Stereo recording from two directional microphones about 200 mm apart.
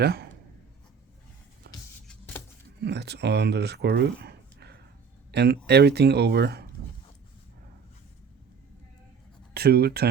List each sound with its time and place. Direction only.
0.0 s speech: 50° right (ahead or behind)
1.7 s music: 55° right (ahead or behind)
2.8 s speech: 55° right (ahead or behind)
9.6 s speech: 50° right (ahead or behind)